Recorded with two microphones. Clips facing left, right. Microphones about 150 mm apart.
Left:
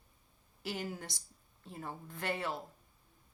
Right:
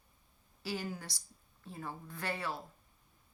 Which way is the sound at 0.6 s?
20° left (ahead or behind).